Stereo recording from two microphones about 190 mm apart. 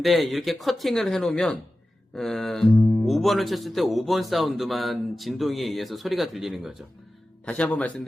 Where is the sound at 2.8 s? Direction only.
15° left (ahead or behind).